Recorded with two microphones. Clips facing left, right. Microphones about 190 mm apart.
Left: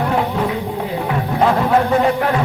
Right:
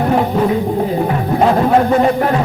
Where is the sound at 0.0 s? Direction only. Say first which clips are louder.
Right 4 dB; 40° right (ahead or behind).